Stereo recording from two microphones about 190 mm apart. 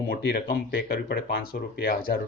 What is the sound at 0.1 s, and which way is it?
Speech, 55° left (ahead or behind).